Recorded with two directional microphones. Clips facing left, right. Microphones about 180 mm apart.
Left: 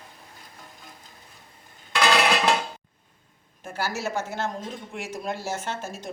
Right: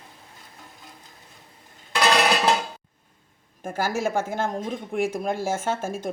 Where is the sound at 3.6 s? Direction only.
50° right (ahead or behind).